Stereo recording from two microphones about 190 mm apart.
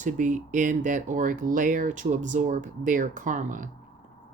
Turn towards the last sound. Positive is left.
turn(degrees=-40)  # may be behind; listen again after turning